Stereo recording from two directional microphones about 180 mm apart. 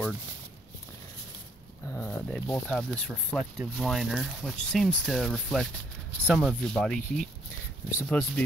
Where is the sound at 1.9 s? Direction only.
5° left (ahead or behind).